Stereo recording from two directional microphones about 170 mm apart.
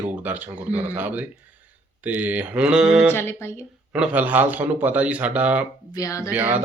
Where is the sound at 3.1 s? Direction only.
15° left (ahead or behind).